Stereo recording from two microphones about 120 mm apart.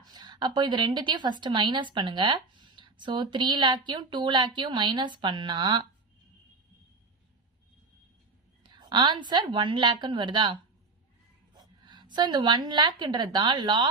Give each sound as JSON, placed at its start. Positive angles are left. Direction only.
{"t": 0.0, "sound": "a woman's voice", "side_deg": -35}
{"t": 8.6, "sound": "a woman's voice", "side_deg": -40}